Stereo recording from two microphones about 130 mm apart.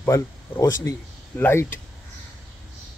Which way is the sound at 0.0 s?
20° left (ahead or behind).